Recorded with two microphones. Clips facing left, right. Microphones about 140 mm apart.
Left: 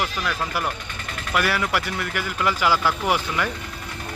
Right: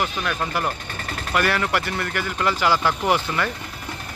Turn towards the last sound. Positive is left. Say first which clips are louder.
# right 2 dB
turn(degrees=10)  # may be behind; listen again after turning